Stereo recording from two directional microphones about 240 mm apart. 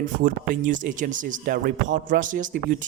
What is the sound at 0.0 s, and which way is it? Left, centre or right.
A man's voice, right.